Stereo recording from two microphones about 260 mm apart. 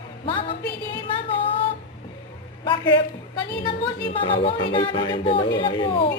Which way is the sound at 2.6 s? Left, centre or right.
Centre.